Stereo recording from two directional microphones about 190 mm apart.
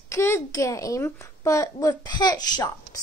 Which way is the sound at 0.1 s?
15° left (ahead or behind).